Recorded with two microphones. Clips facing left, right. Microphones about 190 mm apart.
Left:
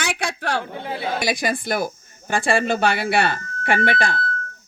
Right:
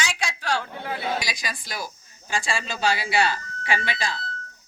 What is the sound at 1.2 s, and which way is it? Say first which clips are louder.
Speech: left 11 dB; 55° left (ahead or behind).